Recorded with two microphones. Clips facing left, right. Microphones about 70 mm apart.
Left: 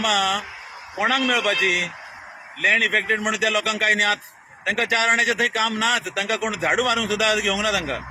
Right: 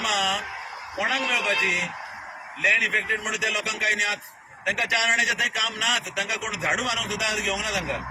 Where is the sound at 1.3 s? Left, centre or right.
Left.